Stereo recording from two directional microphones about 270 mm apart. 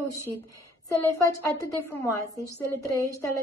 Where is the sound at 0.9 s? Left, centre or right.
Centre.